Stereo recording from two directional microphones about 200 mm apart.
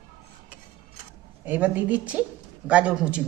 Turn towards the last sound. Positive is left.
turn(degrees=-5)  # may be behind; listen again after turning